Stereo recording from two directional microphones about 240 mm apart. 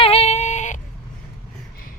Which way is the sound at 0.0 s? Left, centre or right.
Left.